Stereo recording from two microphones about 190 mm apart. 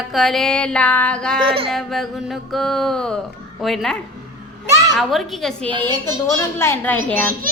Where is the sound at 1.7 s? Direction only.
Centre (ahead or behind).